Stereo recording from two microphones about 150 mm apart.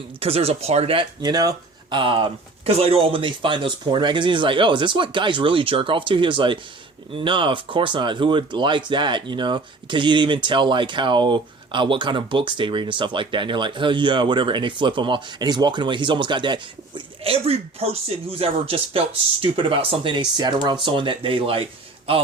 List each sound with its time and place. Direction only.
0.2 s speech: 40° right (ahead or behind)